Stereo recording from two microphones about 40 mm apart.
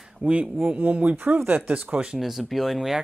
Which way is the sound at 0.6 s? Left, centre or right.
Right.